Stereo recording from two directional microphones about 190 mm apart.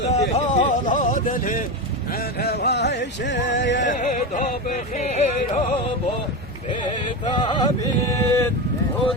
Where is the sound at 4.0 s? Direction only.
40° left (ahead or behind).